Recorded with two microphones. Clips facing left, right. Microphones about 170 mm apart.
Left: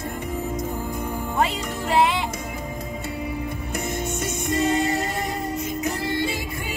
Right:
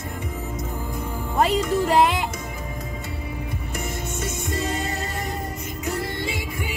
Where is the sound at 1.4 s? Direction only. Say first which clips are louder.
Right 6 dB; 40° right (ahead or behind).